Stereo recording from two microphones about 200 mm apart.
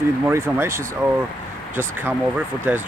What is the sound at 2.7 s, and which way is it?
Speech, 5° right (ahead or behind).